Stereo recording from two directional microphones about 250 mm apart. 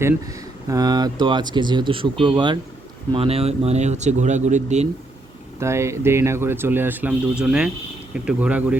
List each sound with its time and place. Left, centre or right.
0.7 s speech: centre
5.5 s speech: centre